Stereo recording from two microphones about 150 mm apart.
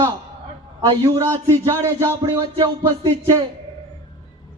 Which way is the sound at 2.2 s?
35° right (ahead or behind).